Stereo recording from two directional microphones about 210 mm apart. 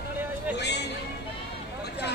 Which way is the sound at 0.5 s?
55° left (ahead or behind).